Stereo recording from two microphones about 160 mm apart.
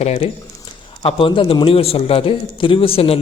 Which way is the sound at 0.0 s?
40° left (ahead or behind).